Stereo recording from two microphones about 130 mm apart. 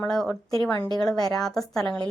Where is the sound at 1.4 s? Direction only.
5° left (ahead or behind).